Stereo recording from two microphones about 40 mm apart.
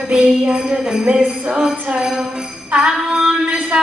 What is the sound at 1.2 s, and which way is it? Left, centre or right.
Jingle bell, right.